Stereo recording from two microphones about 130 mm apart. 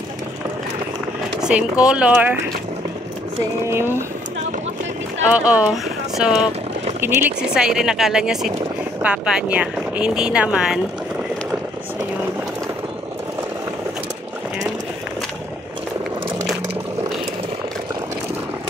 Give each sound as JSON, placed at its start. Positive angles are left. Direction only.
{"t": 1.4, "sound": "speech", "side_deg": -5}
{"t": 3.6, "sound": "speech", "side_deg": -20}
{"t": 5.3, "sound": "speech", "side_deg": -10}
{"t": 7.0, "sound": "speech", "side_deg": -15}